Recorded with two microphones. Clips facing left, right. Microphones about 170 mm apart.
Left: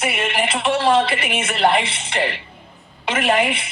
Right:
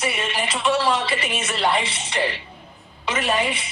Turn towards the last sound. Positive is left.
turn(degrees=55)  # may be behind; listen again after turning